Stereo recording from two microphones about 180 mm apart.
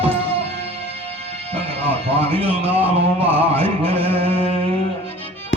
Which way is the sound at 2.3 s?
30° right (ahead or behind).